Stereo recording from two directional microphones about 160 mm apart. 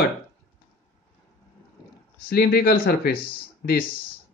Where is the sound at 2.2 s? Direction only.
70° left (ahead or behind).